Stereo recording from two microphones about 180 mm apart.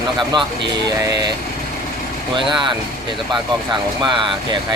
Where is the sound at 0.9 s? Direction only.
20° right (ahead or behind).